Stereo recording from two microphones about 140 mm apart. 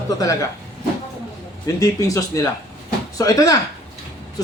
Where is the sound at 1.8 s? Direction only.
25° left (ahead or behind).